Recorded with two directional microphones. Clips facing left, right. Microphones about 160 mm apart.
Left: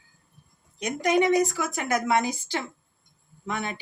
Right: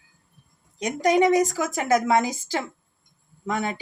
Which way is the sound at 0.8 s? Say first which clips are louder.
Right 3 dB; 40° right (ahead or behind).